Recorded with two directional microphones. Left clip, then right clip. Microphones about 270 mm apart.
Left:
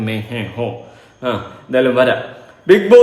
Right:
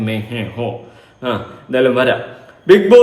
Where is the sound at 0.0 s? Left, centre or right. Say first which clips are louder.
Right 1 dB; centre.